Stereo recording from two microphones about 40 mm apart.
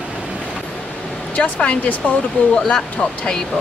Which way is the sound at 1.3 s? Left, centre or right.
Left.